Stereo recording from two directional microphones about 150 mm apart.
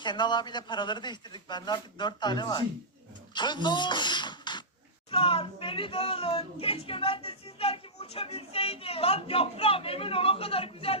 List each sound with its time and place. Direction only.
0.0 s a man's voice: 30° left (ahead or behind)